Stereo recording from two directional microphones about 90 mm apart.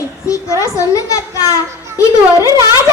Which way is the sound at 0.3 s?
40° left (ahead or behind).